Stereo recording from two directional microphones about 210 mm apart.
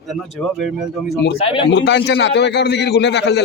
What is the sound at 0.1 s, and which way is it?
Speech, centre (ahead or behind).